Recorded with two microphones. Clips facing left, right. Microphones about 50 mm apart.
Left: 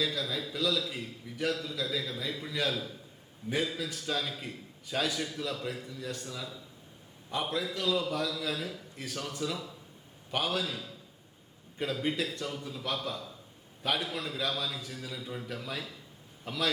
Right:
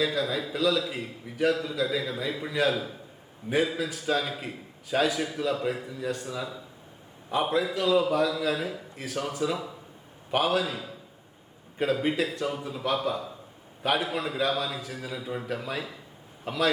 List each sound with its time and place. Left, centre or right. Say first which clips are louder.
0.0 s a man's voice: right 6 dB; centre
15.1 s a man's voice: right 8 dB; centre